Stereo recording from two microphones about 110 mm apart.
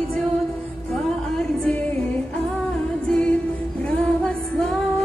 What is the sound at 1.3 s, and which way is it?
Music, 10° left (ahead or behind).